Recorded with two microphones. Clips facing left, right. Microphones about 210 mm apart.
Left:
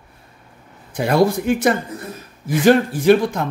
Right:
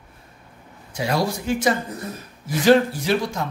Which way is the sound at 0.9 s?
55° left (ahead or behind).